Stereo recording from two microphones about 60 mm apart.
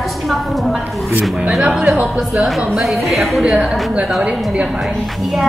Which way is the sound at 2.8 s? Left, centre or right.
Centre.